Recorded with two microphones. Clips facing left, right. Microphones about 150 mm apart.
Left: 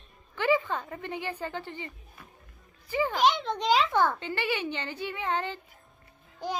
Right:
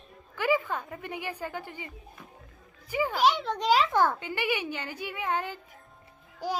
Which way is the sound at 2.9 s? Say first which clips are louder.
Even; 10° right (ahead or behind).